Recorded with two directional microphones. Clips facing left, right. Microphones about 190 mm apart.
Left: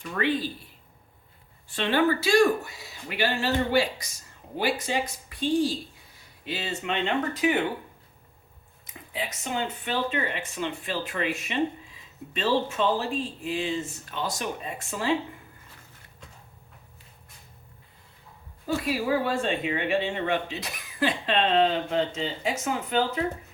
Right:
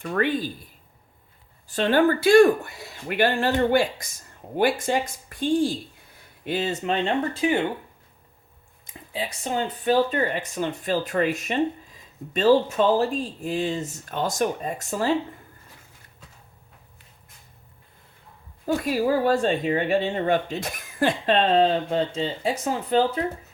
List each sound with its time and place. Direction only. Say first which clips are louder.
0.0 s speech: right 3 dB; 50° right (ahead or behind)
1.6 s speech: right 4 dB; 40° right (ahead or behind)
8.9 s speech: right 3 dB; 30° right (ahead or behind)
18.9 s speech: right 5 dB; 40° right (ahead or behind)